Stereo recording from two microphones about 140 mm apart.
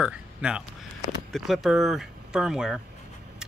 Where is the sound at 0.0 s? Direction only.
5° right (ahead or behind).